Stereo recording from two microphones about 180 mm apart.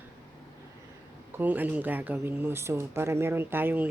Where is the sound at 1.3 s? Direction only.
10° right (ahead or behind).